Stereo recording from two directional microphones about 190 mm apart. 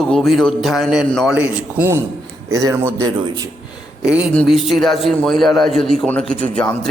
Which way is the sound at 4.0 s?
5° right (ahead or behind).